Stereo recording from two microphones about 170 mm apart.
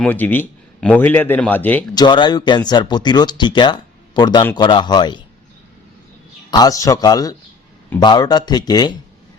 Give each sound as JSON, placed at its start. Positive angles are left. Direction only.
{"t": 0.0, "sound": "speech", "side_deg": 10}
{"t": 2.0, "sound": "speech", "side_deg": 25}
{"t": 6.5, "sound": "speech", "side_deg": 20}